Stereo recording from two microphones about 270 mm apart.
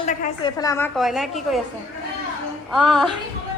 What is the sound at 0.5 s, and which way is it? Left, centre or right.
A woman's voice, centre.